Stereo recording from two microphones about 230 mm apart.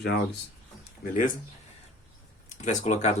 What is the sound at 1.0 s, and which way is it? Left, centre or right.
Speech, left.